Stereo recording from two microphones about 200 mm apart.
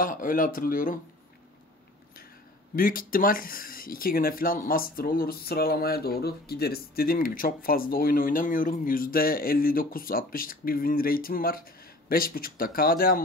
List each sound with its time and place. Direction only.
0.0 s speech: 45° left (ahead or behind)
2.7 s speech: 45° left (ahead or behind)